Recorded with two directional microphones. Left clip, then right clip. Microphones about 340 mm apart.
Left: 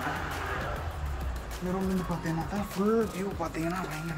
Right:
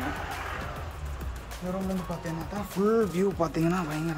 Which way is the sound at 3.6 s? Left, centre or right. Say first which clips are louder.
Right 3 dB; right.